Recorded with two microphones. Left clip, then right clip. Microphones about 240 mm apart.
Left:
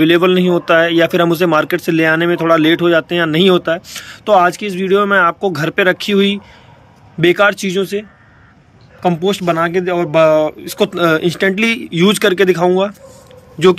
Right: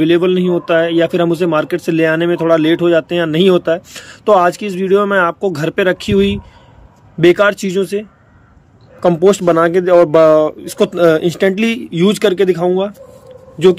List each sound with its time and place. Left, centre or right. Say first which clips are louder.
0.0 s a man's voice: left 1 dB; centre